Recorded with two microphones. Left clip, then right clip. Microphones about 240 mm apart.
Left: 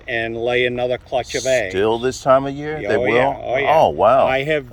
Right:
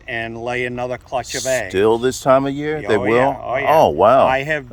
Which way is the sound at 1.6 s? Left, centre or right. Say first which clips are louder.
Right 3 dB; right.